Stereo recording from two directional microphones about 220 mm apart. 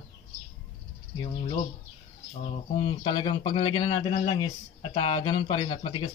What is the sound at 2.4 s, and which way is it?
Speech, 25° left (ahead or behind).